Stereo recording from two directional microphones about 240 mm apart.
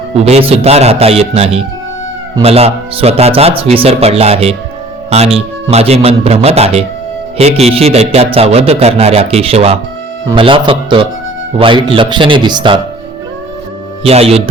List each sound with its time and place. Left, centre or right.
0.2 s speech: right
14.0 s speech: right